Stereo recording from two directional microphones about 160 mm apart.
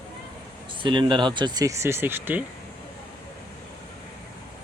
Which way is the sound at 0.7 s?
30° right (ahead or behind).